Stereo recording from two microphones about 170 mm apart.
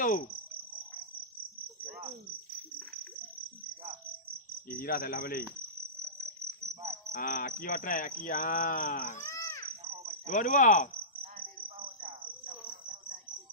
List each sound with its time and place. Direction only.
0.0 s cricket: 55° left (ahead or behind)
4.7 s speech: 60° left (ahead or behind)
7.1 s speech: 50° left (ahead or behind)
9.2 s a sound: 15° left (ahead or behind)
10.2 s speech: 50° left (ahead or behind)